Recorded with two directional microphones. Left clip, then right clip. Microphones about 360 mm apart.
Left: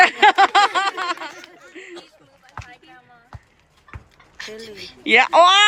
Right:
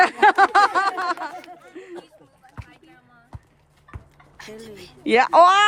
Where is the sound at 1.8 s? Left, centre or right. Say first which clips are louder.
Left 4 dB; centre.